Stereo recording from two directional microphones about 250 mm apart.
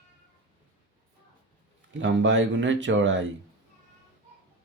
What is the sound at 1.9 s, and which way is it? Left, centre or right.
Speech, right.